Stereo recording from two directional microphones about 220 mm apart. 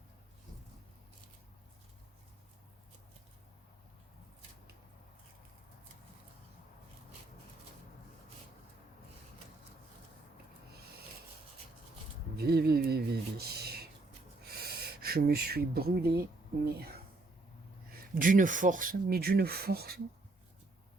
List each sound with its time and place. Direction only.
12.4 s a sound: 45° right (ahead or behind)
14.6 s speech: 45° right (ahead or behind)
18.1 s speech: 40° right (ahead or behind)